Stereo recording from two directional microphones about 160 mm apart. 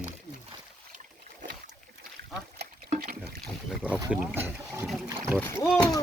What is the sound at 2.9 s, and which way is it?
Boat, 50° right (ahead or behind).